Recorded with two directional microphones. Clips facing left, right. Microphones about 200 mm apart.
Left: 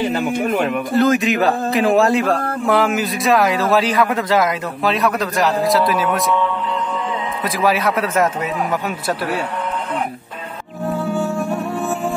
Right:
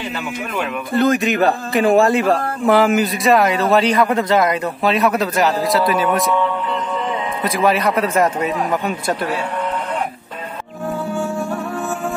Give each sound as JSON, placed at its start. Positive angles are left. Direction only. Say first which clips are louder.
{"t": 0.0, "sound": "speech", "louder": "left 7 dB", "side_deg": 50}
{"t": 0.9, "sound": "a man's voice", "louder": "even", "side_deg": 0}
{"t": 7.4, "sound": "a man's voice", "louder": "right 1 dB", "side_deg": 0}